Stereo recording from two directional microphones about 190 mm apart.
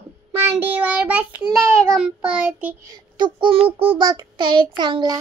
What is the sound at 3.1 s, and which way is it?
Child singing, 25° right (ahead or behind).